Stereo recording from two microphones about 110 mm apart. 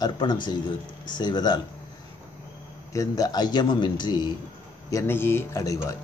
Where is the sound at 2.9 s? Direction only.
35° left (ahead or behind).